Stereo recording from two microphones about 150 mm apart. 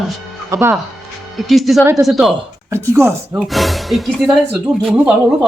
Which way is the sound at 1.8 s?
15° right (ahead or behind).